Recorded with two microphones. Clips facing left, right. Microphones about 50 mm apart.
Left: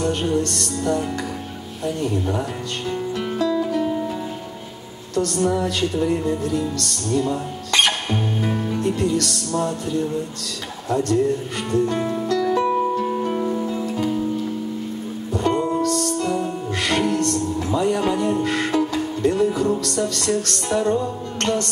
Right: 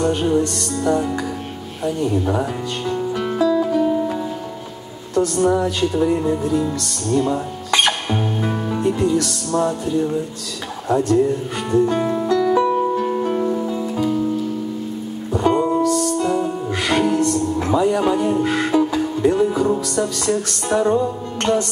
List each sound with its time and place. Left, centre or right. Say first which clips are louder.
0.0 s music: right 3 dB; centre
3.2 s music: right 4 dB; centre
5.1 s a woman's voice: right 4 dB; centre
5.8 s music: right 3 dB; centre
12.7 s harp: right 2 dB; centre
13.2 s music: right 3 dB; centre
15.3 s music: right 4 dB; centre